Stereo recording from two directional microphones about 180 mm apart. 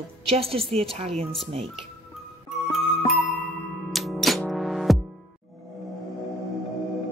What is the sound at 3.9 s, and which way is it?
Music, centre (ahead or behind).